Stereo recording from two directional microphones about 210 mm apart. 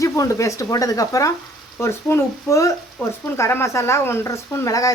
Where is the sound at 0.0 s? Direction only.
15° left (ahead or behind).